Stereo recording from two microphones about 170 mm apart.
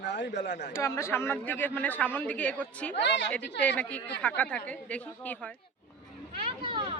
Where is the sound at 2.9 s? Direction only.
90° left.